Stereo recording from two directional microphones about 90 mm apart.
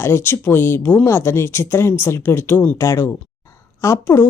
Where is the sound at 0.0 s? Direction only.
30° left (ahead or behind).